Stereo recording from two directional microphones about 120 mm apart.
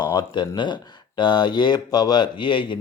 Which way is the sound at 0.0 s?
40° left (ahead or behind).